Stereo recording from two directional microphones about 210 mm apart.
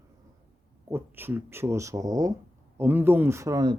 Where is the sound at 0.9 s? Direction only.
10° right (ahead or behind).